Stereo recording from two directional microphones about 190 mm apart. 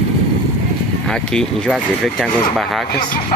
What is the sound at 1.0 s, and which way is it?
Speech, 5° left (ahead or behind).